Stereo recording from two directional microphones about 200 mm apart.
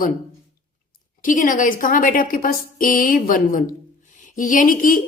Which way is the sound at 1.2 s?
40° left (ahead or behind).